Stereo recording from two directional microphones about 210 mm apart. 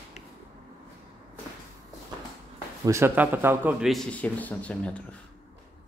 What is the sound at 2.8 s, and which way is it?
A man's voice, 10° right (ahead or behind).